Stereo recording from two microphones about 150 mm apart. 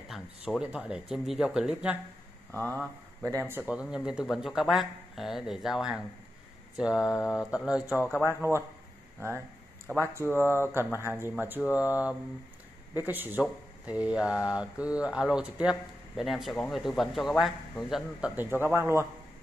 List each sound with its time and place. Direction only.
0.1 s speech: centre (ahead or behind)
2.5 s speech: 10° left (ahead or behind)
3.2 s speech: 15° right (ahead or behind)
8.4 s speech: 15° right (ahead or behind)
10.3 s speech: 15° right (ahead or behind)